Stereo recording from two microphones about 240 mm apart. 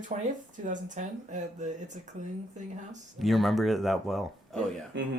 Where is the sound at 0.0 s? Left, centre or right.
Right.